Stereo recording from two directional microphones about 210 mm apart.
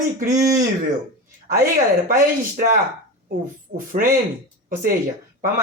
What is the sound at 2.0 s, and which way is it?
Speech, 40° right (ahead or behind).